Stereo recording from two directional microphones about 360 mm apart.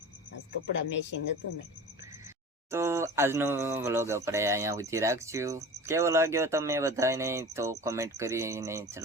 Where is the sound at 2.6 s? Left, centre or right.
Centre.